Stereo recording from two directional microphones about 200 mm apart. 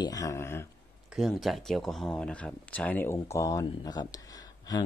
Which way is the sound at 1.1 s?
Centre (ahead or behind).